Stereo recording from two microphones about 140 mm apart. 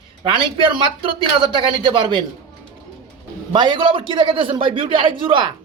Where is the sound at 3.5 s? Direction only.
35° right (ahead or behind).